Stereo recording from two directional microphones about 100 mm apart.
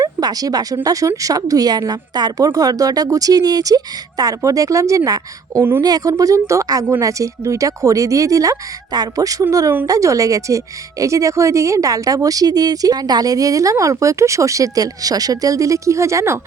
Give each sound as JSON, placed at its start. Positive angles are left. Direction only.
{"t": 0.0, "sound": "a woman's voice", "side_deg": -40}